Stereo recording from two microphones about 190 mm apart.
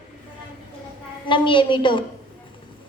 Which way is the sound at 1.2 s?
25° left (ahead or behind).